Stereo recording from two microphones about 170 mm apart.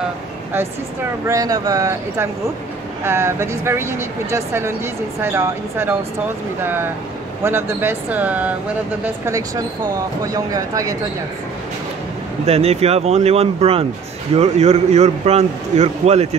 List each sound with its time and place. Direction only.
1.2 s speech: 20° right (ahead or behind)
12.4 s a man's voice: 40° right (ahead or behind)